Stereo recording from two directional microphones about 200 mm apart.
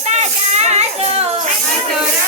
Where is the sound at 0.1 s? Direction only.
35° right (ahead or behind).